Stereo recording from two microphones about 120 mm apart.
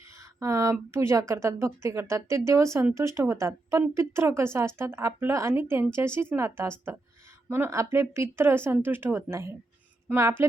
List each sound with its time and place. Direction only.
0.2 s speech: 25° right (ahead or behind)